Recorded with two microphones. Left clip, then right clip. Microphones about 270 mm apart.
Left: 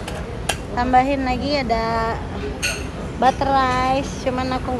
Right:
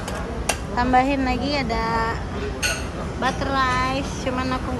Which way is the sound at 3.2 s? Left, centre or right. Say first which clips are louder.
Left 6 dB; centre.